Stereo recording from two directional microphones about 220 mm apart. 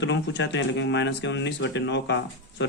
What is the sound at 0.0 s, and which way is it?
Speech, 55° left (ahead or behind).